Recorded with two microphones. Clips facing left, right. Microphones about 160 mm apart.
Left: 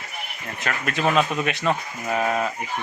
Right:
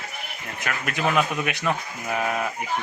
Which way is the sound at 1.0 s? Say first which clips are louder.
Left 2 dB; 25° left (ahead or behind).